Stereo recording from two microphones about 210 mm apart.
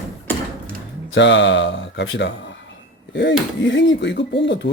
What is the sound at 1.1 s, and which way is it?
Speech, 60° left (ahead or behind).